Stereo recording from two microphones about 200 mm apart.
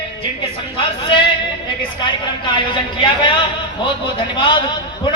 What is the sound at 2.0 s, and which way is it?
A man's voice, 25° left (ahead or behind).